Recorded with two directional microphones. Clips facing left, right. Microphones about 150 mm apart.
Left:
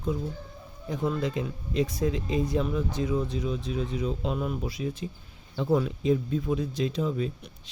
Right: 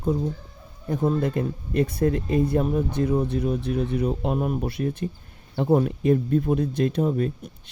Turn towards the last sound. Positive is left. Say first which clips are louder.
# right 5 dB
turn(degrees=-50)  # may be behind; listen again after turning